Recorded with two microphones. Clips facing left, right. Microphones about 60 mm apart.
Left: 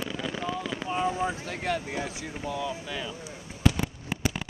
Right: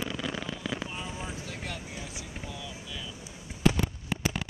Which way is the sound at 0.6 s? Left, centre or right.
Centre.